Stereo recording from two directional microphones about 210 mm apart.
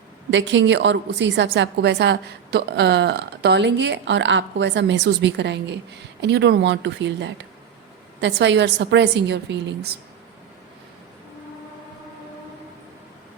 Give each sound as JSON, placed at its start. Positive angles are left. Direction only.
{"t": 0.3, "sound": "a woman's voice", "side_deg": -60}